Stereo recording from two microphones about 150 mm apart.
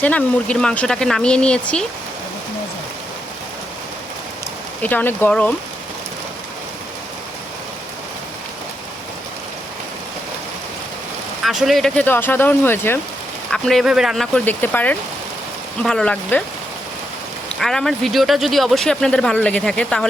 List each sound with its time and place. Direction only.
0.0 s speech: 10° left (ahead or behind)
4.8 s speech: 10° left (ahead or behind)
11.4 s speech: centre (ahead or behind)
12.0 s speech: 15° left (ahead or behind)
13.5 s speech: 5° left (ahead or behind)
14.3 s speech: 10° left (ahead or behind)
17.6 s speech: 5° left (ahead or behind)